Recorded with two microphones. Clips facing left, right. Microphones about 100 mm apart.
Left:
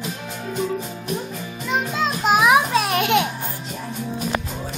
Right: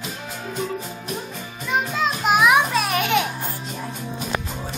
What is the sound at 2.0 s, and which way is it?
Music, 30° left (ahead or behind).